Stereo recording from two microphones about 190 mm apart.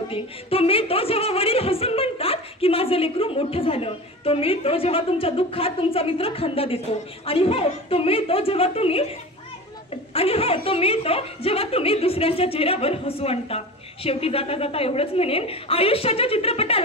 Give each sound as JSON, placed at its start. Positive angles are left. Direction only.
{"t": 0.1, "sound": "speech", "side_deg": 30}
{"t": 10.1, "sound": "a woman's voice", "side_deg": 30}